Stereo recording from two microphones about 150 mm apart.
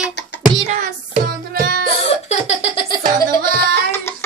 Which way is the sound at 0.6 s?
50° right (ahead or behind).